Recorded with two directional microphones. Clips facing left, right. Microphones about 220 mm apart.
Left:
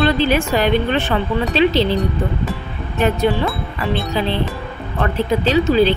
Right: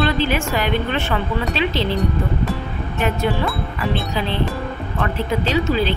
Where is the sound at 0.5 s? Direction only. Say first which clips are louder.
Left 5 dB; 30° left (ahead or behind).